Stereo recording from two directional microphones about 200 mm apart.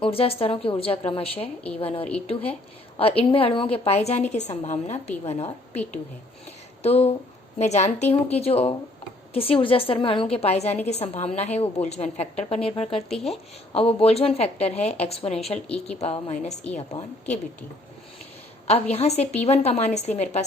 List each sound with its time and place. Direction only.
0.0 s a woman's voice: 30° left (ahead or behind)
6.8 s a woman's voice: 30° left (ahead or behind)
17.2 s a woman's voice: 5° left (ahead or behind)
18.7 s a woman's voice: 30° left (ahead or behind)